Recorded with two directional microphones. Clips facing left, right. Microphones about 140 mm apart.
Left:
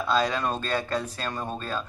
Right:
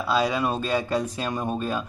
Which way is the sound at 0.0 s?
10° right (ahead or behind).